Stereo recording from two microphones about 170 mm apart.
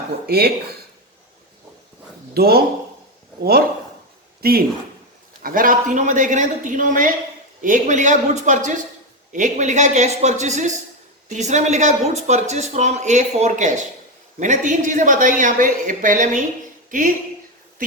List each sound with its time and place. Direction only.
0.3 s speech: 65° right (ahead or behind)
2.3 s speech: 65° right (ahead or behind)
4.4 s speech: 65° right (ahead or behind)